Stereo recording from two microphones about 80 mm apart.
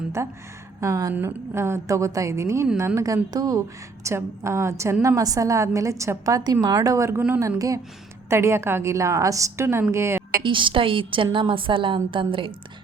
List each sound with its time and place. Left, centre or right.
0.2 s a woman's voice: right
1.1 s a woman's voice: right
4.0 s a woman's voice: right
5.0 s a woman's voice: right
10.4 s a woman's voice: right